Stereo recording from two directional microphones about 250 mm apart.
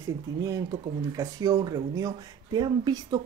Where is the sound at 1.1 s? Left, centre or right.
Centre.